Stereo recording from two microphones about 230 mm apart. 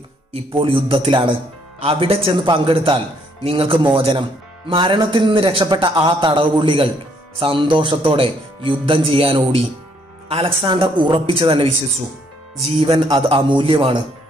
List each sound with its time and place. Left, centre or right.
0.3 s speech: right